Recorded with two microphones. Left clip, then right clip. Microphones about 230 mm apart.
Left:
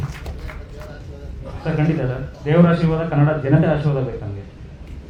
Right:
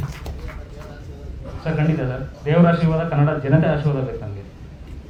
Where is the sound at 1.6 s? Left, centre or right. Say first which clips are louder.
Left 1 dB; right.